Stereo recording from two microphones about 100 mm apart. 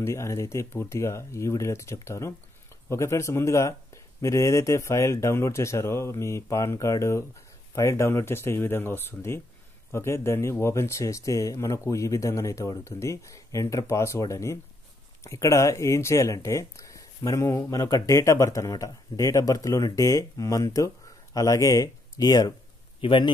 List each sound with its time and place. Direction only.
0.0 s speech: 30° left (ahead or behind)
22.9 s a man's voice: 55° left (ahead or behind)